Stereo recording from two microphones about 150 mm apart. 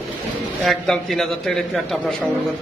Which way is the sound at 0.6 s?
Centre (ahead or behind).